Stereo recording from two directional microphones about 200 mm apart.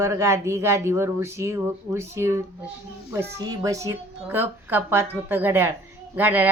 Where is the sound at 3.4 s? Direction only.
20° right (ahead or behind).